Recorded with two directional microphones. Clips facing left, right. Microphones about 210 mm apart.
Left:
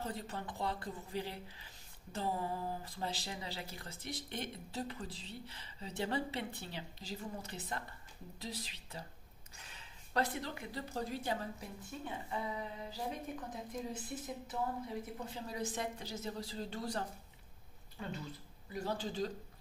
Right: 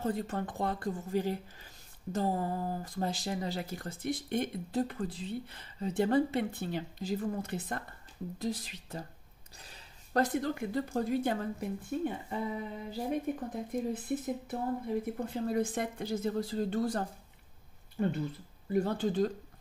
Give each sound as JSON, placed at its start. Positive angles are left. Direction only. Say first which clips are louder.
{"t": 0.0, "sound": "speech", "louder": "right 9 dB", "side_deg": -50}
{"t": 9.6, "sound": "speech", "louder": "right 3 dB", "side_deg": -35}
{"t": 18.7, "sound": "speech", "louder": "right 9 dB", "side_deg": -55}